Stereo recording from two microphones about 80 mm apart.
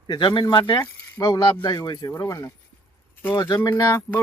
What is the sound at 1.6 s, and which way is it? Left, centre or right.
Speech, left.